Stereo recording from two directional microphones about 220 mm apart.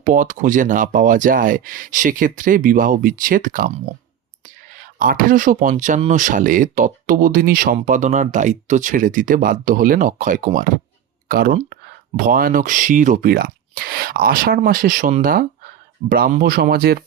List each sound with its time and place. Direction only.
0.0 s speech: 35° right (ahead or behind)